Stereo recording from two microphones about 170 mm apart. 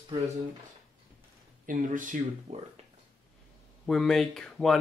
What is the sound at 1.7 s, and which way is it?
Speech, 50° right (ahead or behind).